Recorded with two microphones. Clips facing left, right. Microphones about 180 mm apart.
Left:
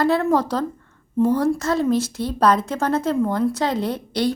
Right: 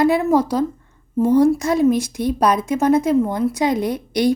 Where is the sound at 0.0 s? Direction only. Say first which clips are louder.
Right 3 dB; 10° right (ahead or behind).